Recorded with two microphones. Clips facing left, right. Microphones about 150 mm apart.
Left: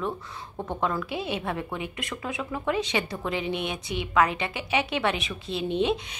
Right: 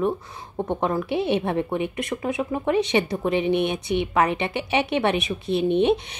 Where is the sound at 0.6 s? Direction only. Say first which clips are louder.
Right 5 dB; 20° right (ahead or behind).